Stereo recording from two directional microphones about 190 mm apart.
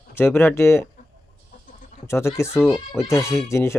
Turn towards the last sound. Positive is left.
turn(degrees=15)  # may be behind; listen again after turning